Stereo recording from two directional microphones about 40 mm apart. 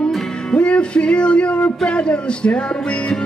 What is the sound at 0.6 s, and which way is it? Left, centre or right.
Speech, left.